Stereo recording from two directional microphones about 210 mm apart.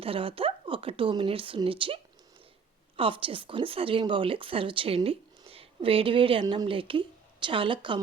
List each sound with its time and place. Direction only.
0.0 s speech: 25° right (ahead or behind)